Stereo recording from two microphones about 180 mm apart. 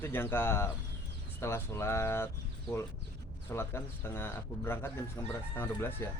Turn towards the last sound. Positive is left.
turn(degrees=10)  # may be behind; listen again after turning